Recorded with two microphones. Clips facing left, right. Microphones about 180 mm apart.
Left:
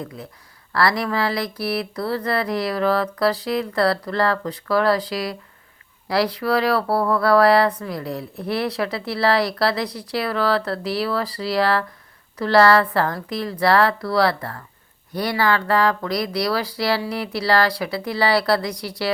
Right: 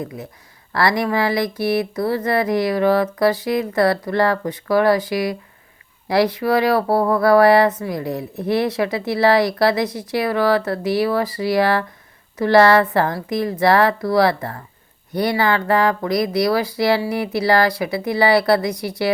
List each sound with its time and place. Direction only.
0.0 s speech: 20° right (ahead or behind)
18.7 s speech: 55° right (ahead or behind)